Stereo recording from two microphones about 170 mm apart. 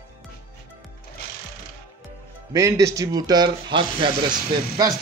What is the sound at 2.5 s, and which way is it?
Speech, 20° right (ahead or behind).